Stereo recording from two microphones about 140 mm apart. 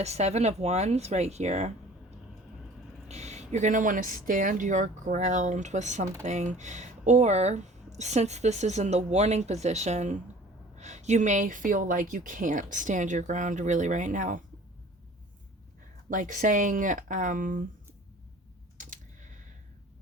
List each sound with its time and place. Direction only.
0.0 s a woman's voice: 50° right (ahead or behind); by 14.4 s 65° right (ahead or behind)
16.0 s speech: 70° right (ahead or behind)
18.8 s typing: 65° right (ahead or behind)